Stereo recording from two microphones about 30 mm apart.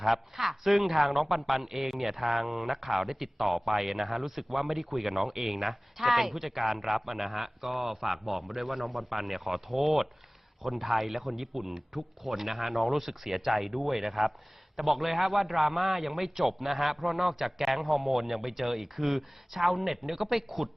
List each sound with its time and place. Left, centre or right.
0.0 s a man's voice: centre